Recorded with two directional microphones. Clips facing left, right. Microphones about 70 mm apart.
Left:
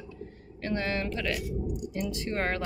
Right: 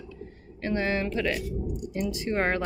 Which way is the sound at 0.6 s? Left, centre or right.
Centre.